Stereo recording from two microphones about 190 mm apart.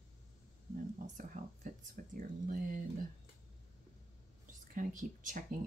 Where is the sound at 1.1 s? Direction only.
40° right (ahead or behind).